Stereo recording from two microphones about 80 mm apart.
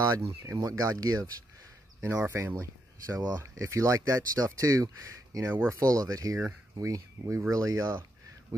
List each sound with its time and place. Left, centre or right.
0.2 s speech: right
0.7 s speech: right
2.0 s speech: right
3.2 s speech: right
3.6 s speech: right
5.5 s speech: right
5.8 s speech: right